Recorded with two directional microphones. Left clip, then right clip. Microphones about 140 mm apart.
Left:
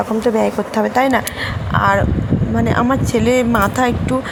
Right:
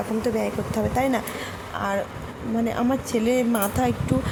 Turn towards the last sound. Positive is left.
turn(degrees=0)  # may be behind; listen again after turning